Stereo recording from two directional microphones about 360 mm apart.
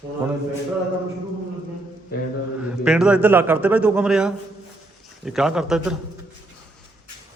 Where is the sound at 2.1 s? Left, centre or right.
Left.